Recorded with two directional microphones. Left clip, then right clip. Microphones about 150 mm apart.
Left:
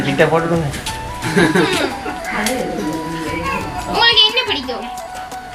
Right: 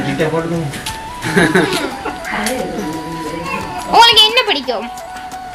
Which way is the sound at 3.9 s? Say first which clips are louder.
Right 4 dB; 15° right (ahead or behind).